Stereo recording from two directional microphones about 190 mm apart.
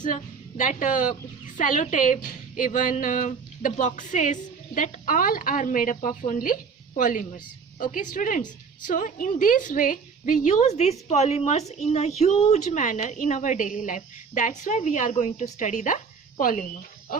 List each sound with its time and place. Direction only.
0.0 s a woman's voice: 45° left (ahead or behind)